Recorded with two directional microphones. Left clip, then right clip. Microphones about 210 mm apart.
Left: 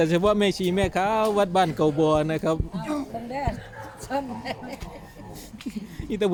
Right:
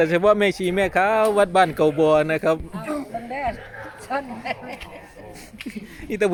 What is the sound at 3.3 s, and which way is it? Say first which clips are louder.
A woman's voice: right 4 dB; 50° left (ahead or behind).